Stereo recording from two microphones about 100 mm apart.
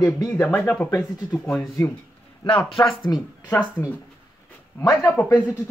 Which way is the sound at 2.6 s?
55° left (ahead or behind).